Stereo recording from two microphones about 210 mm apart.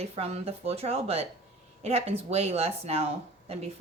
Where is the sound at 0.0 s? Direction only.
30° right (ahead or behind).